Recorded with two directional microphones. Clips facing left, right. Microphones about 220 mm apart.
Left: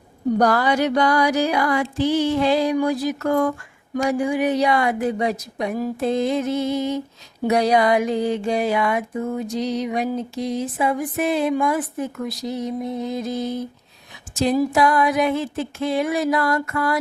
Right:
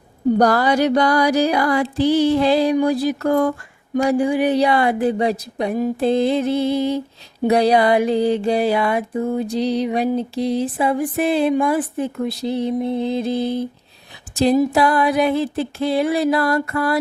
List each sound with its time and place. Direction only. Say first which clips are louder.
0.3 s mantra: right 2 dB; 35° right (ahead or behind)
10.2 s speech: right 4 dB; 30° right (ahead or behind)
14.7 s mantra: right 1 dB; 35° right (ahead or behind)